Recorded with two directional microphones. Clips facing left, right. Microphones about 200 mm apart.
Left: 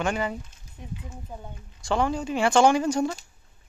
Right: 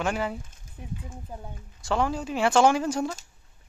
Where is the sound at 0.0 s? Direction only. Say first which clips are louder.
Left 1 dB; centre (ahead or behind).